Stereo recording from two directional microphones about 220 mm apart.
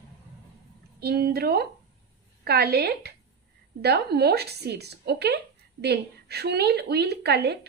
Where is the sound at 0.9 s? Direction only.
45° right (ahead or behind).